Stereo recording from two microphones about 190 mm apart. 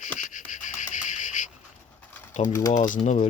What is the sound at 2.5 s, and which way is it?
Speech, 15° left (ahead or behind).